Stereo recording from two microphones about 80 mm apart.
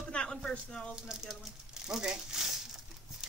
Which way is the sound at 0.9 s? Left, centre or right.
Centre.